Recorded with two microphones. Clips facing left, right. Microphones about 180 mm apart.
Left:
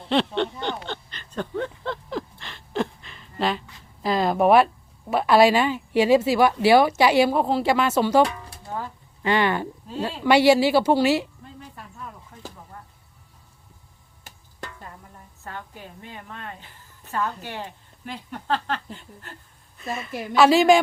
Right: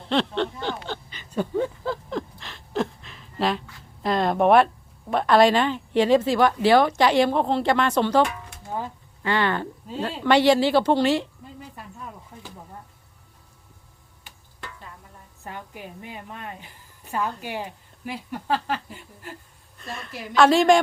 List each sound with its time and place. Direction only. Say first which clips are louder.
0.1 s a sound: left 1 dB; centre (ahead or behind)
5.1 s speech: left 1 dB; 5° left (ahead or behind)
9.2 s speech: left 2 dB; 15° left (ahead or behind)
12.3 s a sound: left 2 dB; 20° right (ahead or behind)
15.4 s a woman's voice: right 1 dB; 15° right (ahead or behind)
19.8 s a woman's voice: left 5 dB; 5° left (ahead or behind)